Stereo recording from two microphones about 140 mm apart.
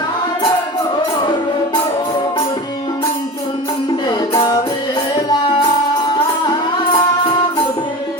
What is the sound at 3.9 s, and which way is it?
Music, 30° left (ahead or behind).